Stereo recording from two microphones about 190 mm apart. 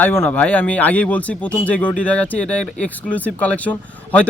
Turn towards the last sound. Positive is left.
turn(degrees=5)  # may be behind; listen again after turning